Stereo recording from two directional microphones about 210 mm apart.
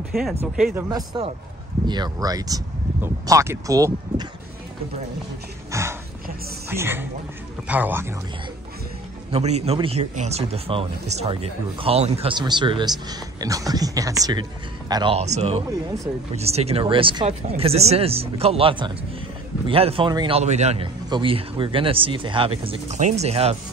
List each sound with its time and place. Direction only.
0.1 s speech: centre (ahead or behind)
0.7 s a man's voice: 20° right (ahead or behind)
5.7 s speech: 15° right (ahead or behind)
9.3 s a man's voice: 30° right (ahead or behind)